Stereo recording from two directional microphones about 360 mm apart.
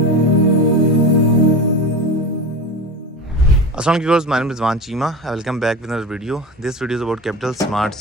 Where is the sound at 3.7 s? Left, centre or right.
Centre.